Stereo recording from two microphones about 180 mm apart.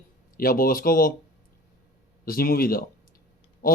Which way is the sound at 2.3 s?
55° left (ahead or behind).